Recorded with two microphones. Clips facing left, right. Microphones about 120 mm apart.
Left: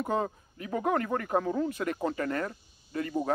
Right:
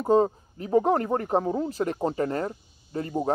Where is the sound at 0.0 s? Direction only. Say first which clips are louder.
Right 9 dB; 30° right (ahead or behind).